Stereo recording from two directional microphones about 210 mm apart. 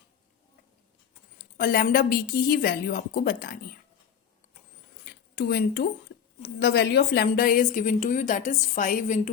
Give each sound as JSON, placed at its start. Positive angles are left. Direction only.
{"t": 1.4, "sound": "a woman's voice", "side_deg": 45}
{"t": 5.0, "sound": "a woman's voice", "side_deg": 50}